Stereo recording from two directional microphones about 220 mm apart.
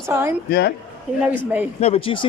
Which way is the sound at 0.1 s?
10° right (ahead or behind).